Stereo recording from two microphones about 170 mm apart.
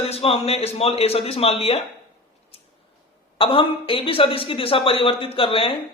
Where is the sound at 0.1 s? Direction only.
35° left (ahead or behind).